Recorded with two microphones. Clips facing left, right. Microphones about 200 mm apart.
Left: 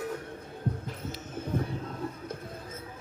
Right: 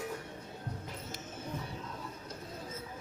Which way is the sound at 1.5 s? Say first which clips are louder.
Left 12 dB; 55° left (ahead or behind).